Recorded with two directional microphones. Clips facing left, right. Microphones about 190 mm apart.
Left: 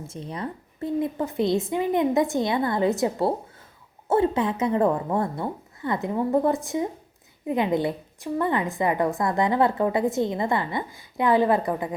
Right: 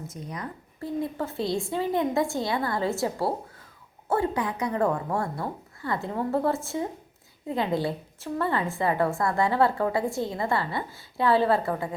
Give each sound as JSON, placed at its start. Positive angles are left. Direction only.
{"t": 0.1, "sound": "a woman's voice", "side_deg": 30}